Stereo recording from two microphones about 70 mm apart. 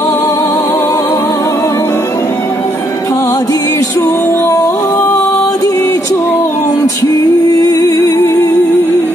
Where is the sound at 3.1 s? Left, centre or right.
Left.